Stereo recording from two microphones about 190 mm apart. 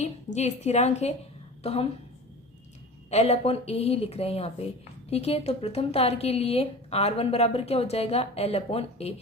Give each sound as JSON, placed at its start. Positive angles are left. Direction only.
{"t": 0.3, "sound": "a woman's voice", "side_deg": 35}
{"t": 3.1, "sound": "a woman's voice", "side_deg": 35}